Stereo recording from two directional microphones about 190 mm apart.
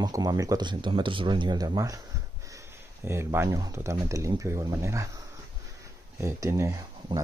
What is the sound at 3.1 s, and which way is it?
Speech, 15° right (ahead or behind).